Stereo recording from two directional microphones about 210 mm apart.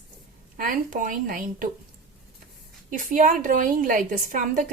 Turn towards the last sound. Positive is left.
turn(degrees=-40)  # may be behind; listen again after turning